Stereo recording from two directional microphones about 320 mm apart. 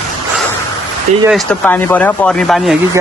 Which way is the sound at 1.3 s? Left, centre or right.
Centre.